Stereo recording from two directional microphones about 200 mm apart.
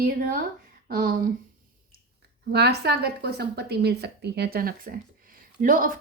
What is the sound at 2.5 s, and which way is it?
Speech, 55° right (ahead or behind).